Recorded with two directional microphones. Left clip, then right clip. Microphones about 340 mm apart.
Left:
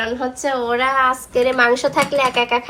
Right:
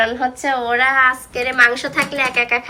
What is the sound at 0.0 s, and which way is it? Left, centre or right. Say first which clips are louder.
A woman's voice: right 3 dB; centre.